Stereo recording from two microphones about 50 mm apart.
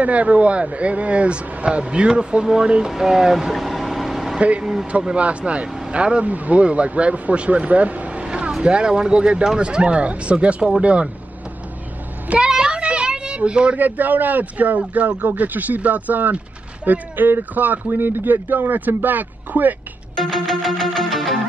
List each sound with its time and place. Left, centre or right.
0.0 s speech: right
2.9 s air conditioning: centre
4.4 s speech: right
12.3 s a sound: centre
13.7 s speech: right
20.2 s music: centre